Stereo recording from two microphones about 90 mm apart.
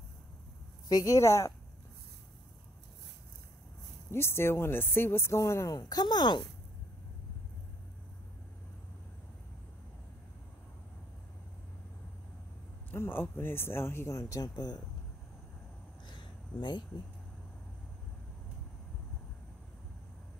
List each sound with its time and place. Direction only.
0.8 s speech: 40° left (ahead or behind)
4.1 s speech: 30° left (ahead or behind)
5.7 s speech: 45° left (ahead or behind)
12.9 s speech: 25° left (ahead or behind); by 14.8 s 45° left (ahead or behind)
16.2 s a sound: 60° left (ahead or behind)